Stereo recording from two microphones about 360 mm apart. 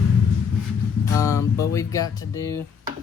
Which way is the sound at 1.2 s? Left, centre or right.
Centre.